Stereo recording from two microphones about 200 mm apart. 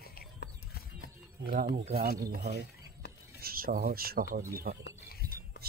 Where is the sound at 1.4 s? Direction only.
45° right (ahead or behind).